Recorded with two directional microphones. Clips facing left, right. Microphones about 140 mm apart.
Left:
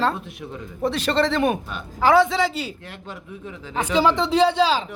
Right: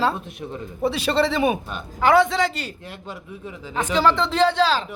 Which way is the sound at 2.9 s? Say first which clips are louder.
Right 1 dB; 10° right (ahead or behind).